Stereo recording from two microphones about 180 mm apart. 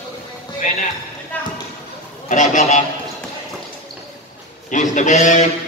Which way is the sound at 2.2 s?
45° left (ahead or behind).